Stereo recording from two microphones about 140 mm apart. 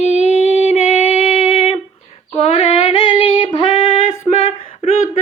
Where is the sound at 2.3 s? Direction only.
40° left (ahead or behind).